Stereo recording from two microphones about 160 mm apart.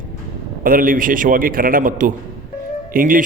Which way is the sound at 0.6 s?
60° right (ahead or behind).